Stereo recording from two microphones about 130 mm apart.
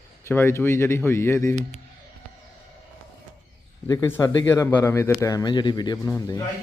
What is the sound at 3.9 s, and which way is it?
Speech, 20° left (ahead or behind).